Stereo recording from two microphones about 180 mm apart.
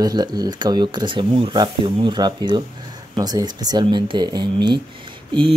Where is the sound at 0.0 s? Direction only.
25° right (ahead or behind).